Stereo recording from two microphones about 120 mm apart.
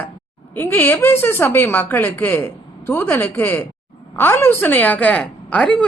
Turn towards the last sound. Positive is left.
turn(degrees=10)  # may be behind; listen again after turning